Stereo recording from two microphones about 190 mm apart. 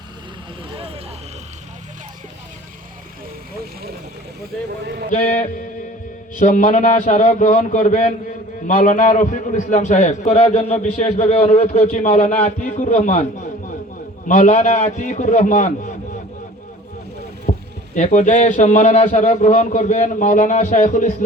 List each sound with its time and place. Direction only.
6.4 s a man's voice: 40° left (ahead or behind)
14.3 s a man's voice: 40° left (ahead or behind)
17.5 s a sound: 40° left (ahead or behind)
17.9 s a man's voice: 40° left (ahead or behind)